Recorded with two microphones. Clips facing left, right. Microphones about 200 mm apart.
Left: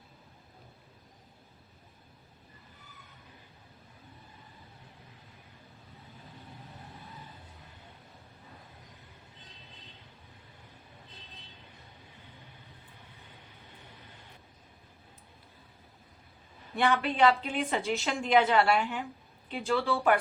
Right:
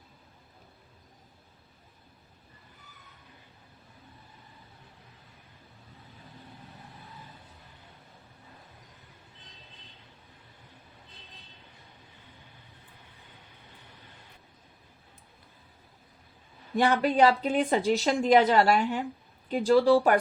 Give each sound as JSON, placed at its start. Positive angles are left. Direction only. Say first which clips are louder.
{"t": 16.7, "sound": "a woman's voice", "louder": "right 4 dB", "side_deg": -40}